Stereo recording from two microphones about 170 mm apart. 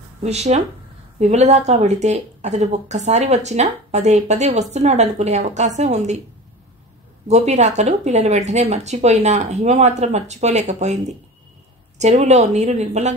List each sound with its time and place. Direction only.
0.2 s speech: 40° right (ahead or behind)
7.2 s speech: 40° right (ahead or behind)